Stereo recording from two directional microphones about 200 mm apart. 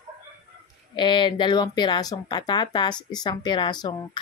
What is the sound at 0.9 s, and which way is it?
Speech, 25° left (ahead or behind).